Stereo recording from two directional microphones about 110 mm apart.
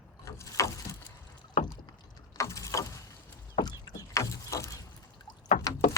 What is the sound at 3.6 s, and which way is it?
Rowboat, 35° left (ahead or behind).